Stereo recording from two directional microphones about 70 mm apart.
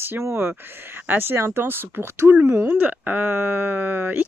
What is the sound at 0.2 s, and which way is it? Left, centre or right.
Speech, right.